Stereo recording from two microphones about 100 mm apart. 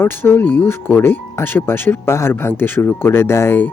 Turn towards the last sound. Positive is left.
turn(degrees=20)  # may be behind; listen again after turning